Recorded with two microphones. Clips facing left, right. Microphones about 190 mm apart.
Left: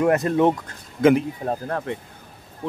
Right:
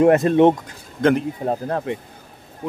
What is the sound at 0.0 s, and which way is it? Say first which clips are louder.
Speech: right 5 dB; 25° right (ahead or behind).